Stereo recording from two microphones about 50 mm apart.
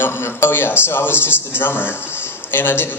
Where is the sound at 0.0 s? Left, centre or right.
Left.